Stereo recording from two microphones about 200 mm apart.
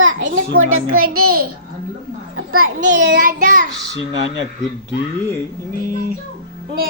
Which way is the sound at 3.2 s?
45° right (ahead or behind).